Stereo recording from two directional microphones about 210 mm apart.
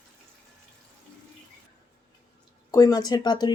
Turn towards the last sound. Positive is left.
turn(degrees=20)  # may be behind; listen again after turning